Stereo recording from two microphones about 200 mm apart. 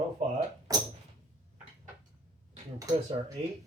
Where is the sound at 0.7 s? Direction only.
20° right (ahead or behind).